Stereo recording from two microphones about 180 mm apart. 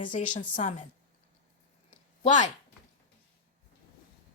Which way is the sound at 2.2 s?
40° left (ahead or behind).